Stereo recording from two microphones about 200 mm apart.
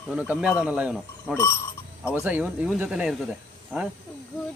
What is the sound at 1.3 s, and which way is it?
Speech, 10° left (ahead or behind).